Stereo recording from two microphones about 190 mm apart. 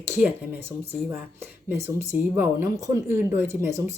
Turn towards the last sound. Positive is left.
turn(degrees=-15)  # may be behind; listen again after turning